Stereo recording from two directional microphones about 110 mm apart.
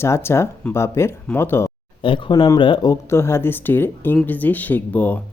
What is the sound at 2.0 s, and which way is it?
Speech, 50° left (ahead or behind).